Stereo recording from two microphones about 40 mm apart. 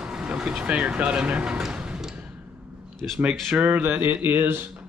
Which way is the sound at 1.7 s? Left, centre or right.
Right.